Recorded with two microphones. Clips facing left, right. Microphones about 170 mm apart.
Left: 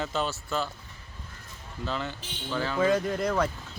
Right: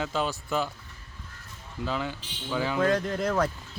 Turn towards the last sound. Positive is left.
turn(degrees=0)  # may be behind; listen again after turning